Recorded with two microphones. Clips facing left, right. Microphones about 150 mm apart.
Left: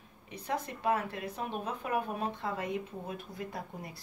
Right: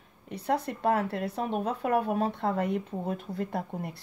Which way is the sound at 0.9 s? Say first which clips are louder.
Right 6 dB; 65° right (ahead or behind).